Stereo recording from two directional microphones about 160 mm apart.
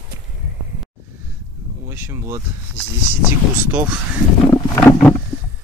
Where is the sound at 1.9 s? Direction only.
15° right (ahead or behind).